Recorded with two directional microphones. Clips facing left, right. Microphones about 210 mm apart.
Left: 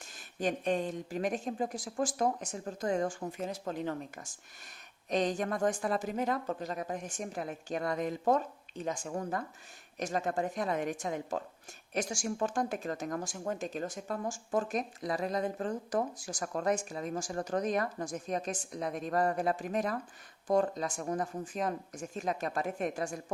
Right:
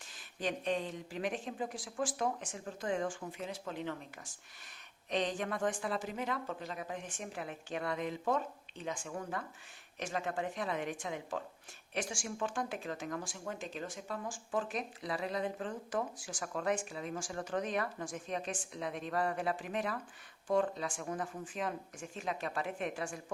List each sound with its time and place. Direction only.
0.0 s speech: 45° left (ahead or behind)